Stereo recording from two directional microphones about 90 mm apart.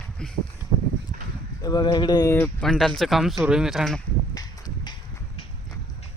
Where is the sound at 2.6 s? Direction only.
5° left (ahead or behind).